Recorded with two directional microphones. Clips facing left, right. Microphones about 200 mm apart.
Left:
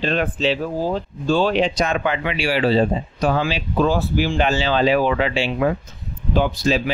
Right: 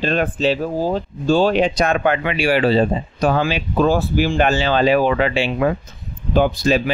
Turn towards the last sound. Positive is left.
turn(degrees=-55)  # may be behind; listen again after turning